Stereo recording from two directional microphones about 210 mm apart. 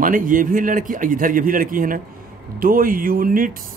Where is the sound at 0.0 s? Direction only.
40° right (ahead or behind).